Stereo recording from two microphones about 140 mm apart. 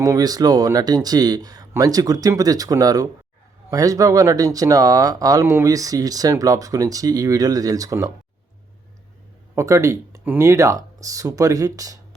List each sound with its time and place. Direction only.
0.0 s speech: 25° right (ahead or behind)
9.6 s speech: 20° right (ahead or behind)